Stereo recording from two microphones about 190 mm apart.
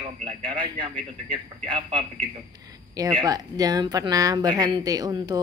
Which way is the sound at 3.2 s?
20° right (ahead or behind).